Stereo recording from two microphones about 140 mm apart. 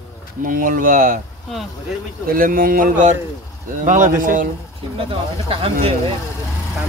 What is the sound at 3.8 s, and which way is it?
Speech, 65° right (ahead or behind).